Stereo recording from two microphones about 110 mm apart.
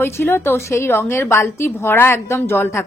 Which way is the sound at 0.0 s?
20° left (ahead or behind).